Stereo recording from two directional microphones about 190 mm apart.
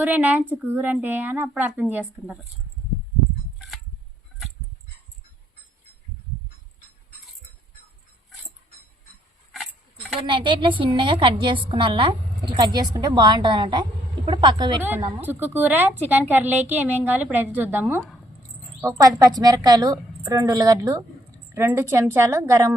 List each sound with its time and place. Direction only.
0.0 s a woman's voice: 10° right (ahead or behind)
9.5 s a sound: centre (ahead or behind)
10.2 s a woman's voice: 25° right (ahead or behind)
14.8 s a woman's voice: 10° right (ahead or behind)